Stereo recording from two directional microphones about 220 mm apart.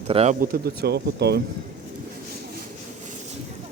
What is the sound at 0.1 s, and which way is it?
Speech, 25° right (ahead or behind).